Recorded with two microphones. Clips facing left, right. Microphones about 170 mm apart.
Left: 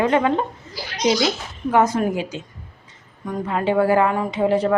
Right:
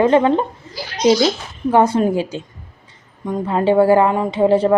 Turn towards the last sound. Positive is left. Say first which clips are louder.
# right 5 dB
turn(degrees=-30)  # may be behind; listen again after turning